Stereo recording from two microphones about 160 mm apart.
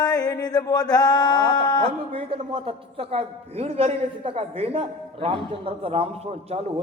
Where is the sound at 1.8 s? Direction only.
35° right (ahead or behind).